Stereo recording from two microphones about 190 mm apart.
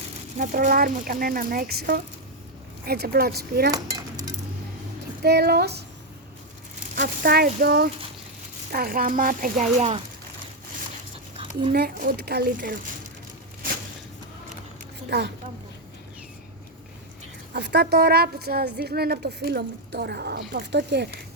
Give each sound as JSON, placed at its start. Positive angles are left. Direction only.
{"t": 0.3, "sound": "a woman's voice", "side_deg": -45}
{"t": 5.2, "sound": "a woman's voice", "side_deg": -60}
{"t": 6.9, "sound": "speech", "side_deg": -45}
{"t": 11.7, "sound": "a woman's voice", "side_deg": -50}
{"t": 15.1, "sound": "a woman's voice", "side_deg": -60}
{"t": 17.5, "sound": "a woman's voice", "side_deg": -60}